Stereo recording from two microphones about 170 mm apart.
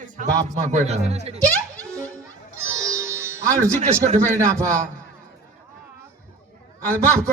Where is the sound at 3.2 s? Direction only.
15° right (ahead or behind).